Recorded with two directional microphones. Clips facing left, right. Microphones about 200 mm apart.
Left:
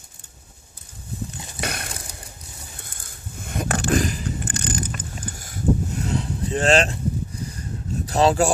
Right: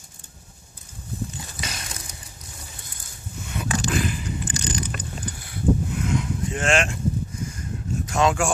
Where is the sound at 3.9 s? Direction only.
40° left (ahead or behind).